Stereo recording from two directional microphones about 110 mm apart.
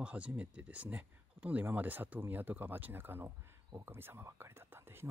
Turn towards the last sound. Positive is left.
turn(degrees=-20)  # may be behind; listen again after turning